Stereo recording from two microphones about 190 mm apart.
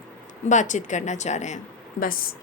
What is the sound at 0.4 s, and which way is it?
Speech, 40° left (ahead or behind).